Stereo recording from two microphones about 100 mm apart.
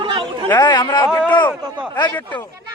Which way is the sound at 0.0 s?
60° right (ahead or behind).